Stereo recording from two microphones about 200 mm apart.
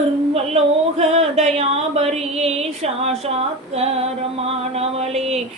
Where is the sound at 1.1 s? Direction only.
35° right (ahead or behind).